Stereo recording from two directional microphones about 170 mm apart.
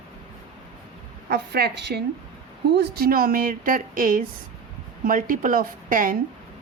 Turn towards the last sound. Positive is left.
turn(degrees=-55)  # may be behind; listen again after turning